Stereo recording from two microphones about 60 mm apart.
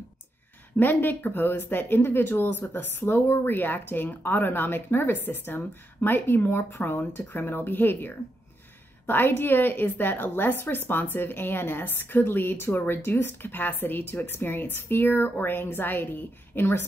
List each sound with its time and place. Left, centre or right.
0.7 s a woman's voice: left